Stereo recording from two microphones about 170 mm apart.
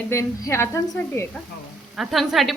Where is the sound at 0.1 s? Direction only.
15° left (ahead or behind).